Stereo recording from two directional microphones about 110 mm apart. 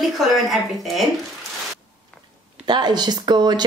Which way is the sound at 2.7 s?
40° right (ahead or behind).